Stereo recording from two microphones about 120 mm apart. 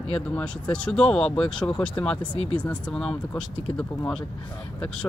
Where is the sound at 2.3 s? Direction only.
45° left (ahead or behind).